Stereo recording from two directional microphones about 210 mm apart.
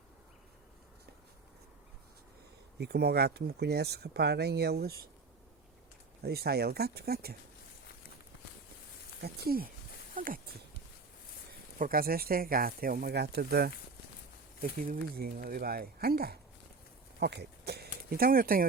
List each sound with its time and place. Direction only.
2.7 s speech: 50° right (ahead or behind)
6.2 s speech: 50° right (ahead or behind)
9.2 s speech: 45° right (ahead or behind)
11.8 s speech: 45° right (ahead or behind)
14.8 s speech: 45° right (ahead or behind)